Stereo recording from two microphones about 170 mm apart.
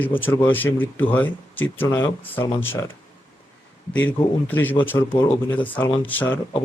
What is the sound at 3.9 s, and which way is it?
Speech, 10° left (ahead or behind).